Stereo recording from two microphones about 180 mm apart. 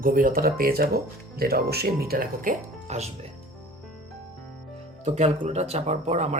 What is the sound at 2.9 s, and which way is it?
Speech, 35° right (ahead or behind).